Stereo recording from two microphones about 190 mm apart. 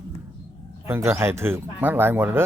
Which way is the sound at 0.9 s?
15° right (ahead or behind).